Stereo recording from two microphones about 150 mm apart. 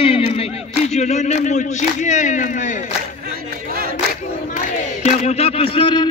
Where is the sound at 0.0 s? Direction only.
40° left (ahead or behind); by 2.8 s 55° left (ahead or behind).